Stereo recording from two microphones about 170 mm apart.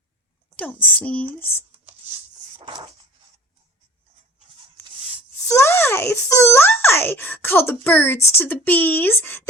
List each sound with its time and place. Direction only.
0.6 s a child's voice: 10° left (ahead or behind)
2.6 s a sound: 30° right (ahead or behind)
5.5 s a child's voice: 15° left (ahead or behind)